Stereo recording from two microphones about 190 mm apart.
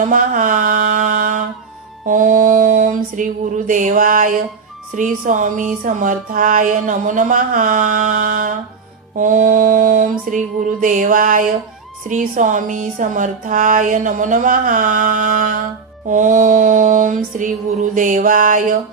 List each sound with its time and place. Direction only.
0.0 s mantra: 45° right (ahead or behind)
2.0 s speech: 45° right (ahead or behind)